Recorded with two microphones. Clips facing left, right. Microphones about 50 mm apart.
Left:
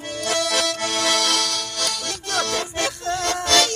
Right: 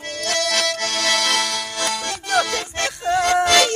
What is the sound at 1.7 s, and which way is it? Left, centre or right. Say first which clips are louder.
Music: right 3 dB; right.